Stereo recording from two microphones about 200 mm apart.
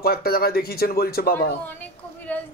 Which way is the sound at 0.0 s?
50° left (ahead or behind).